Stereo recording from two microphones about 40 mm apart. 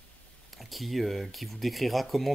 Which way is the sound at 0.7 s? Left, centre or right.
Centre.